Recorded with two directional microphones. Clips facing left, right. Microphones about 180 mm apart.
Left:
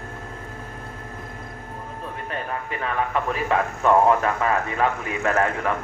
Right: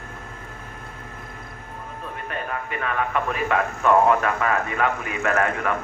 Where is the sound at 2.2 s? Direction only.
30° left (ahead or behind).